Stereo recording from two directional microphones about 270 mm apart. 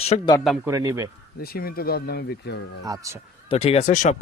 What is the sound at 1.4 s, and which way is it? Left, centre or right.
Speech, left.